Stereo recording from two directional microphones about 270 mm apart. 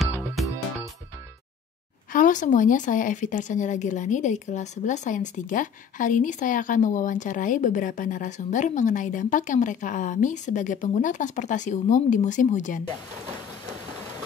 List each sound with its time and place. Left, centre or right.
2.1 s speech: left